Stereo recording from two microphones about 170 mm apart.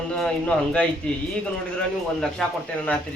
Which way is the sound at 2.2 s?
5° left (ahead or behind).